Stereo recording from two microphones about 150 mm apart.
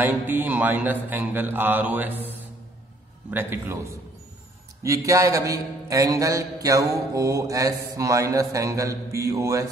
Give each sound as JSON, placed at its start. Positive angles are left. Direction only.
{"t": 0.0, "sound": "a man's voice", "side_deg": -10}
{"t": 3.3, "sound": "a man's voice", "side_deg": -15}